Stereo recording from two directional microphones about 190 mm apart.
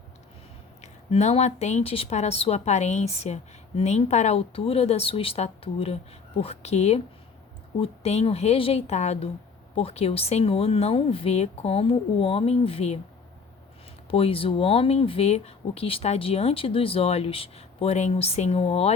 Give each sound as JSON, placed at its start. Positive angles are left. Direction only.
{"t": 0.8, "sound": "speech", "side_deg": 35}
{"t": 14.1, "sound": "speech", "side_deg": 30}